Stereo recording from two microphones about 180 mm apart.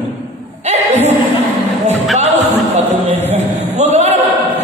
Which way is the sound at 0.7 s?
35° right (ahead or behind).